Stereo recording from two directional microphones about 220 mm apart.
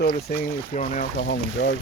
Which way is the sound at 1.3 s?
50° left (ahead or behind).